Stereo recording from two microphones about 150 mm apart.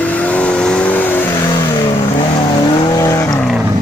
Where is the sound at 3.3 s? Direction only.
5° left (ahead or behind).